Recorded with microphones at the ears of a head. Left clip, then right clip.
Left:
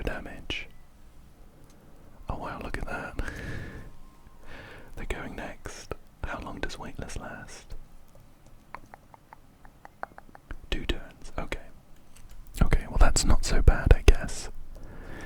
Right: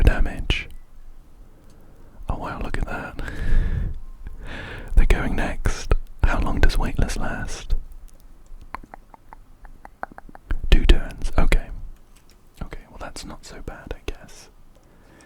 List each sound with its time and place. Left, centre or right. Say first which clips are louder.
0.0 s whispering: right 9 dB; right
2.2 s whispering: right 5 dB; right
8.7 s chewing: right 8 dB; right
9.8 s whispering: right 6 dB; right
12.5 s whispering: left 8 dB; left